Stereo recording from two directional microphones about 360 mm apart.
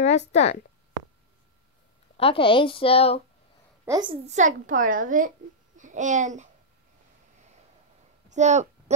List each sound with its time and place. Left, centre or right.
0.0 s a woman's voice: centre
2.1 s a woman's voice: centre
3.8 s a woman's voice: centre
8.3 s a sound: centre